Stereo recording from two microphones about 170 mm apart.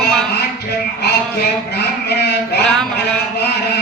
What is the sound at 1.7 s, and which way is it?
Speech, 75° left (ahead or behind).